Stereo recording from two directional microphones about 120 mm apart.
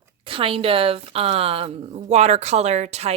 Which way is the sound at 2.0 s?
65° right (ahead or behind).